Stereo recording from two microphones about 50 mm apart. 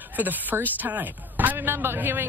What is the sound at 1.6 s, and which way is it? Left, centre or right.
Speech, right.